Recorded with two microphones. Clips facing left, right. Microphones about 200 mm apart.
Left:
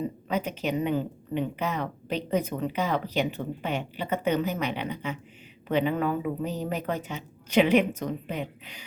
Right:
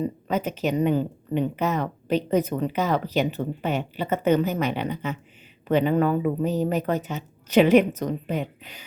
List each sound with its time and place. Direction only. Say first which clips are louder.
0.3 s a woman's voice: right 3 dB; 45° right (ahead or behind)